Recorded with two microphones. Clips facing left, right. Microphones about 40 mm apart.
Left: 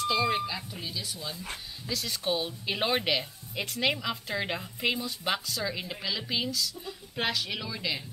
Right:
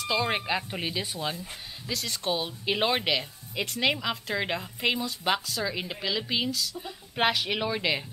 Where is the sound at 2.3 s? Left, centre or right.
Centre.